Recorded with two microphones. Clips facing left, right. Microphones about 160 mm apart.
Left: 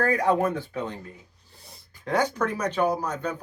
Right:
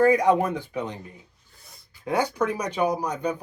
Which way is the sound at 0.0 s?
15° right (ahead or behind).